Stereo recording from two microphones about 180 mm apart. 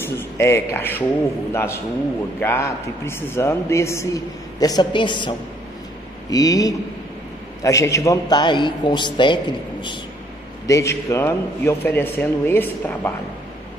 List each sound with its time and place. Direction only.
0.0 s a man's voice: 15° left (ahead or behind)
6.3 s a man's voice: 20° left (ahead or behind)